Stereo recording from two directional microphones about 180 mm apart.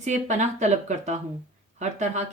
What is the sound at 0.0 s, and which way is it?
Speech, 40° right (ahead or behind).